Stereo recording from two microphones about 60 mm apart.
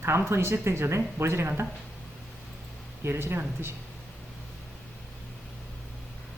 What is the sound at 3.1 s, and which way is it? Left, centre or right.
Speech, right.